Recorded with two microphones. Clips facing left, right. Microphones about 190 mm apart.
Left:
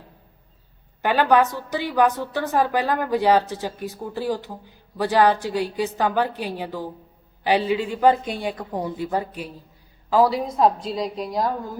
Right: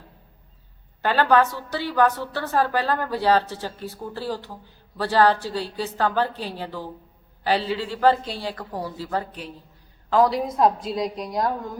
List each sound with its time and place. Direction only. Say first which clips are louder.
1.0 s a woman's voice: left 1 dB; 15° left (ahead or behind)